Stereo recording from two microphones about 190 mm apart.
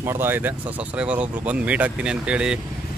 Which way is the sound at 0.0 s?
10° right (ahead or behind).